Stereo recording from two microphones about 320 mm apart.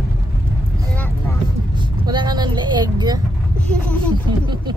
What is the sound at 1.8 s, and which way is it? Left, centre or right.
Vehicle, centre.